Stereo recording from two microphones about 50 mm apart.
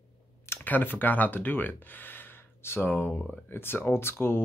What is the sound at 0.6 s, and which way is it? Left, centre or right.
Speech, left.